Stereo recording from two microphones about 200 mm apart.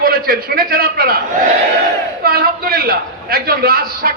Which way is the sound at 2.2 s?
50° right (ahead or behind).